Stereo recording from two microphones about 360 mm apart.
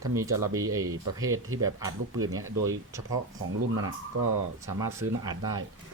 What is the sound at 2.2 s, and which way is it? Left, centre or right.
Speech, right.